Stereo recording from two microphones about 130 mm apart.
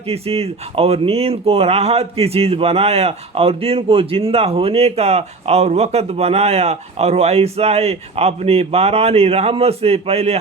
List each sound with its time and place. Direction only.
0.0 s speech: 50° right (ahead or behind)